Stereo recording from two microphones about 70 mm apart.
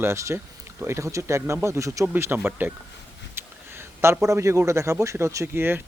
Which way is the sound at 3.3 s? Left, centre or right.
Right.